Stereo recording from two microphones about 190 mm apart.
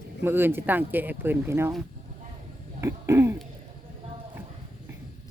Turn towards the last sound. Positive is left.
turn(degrees=-15)  # may be behind; listen again after turning